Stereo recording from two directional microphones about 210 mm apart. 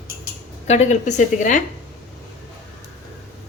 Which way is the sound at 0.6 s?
30° left (ahead or behind).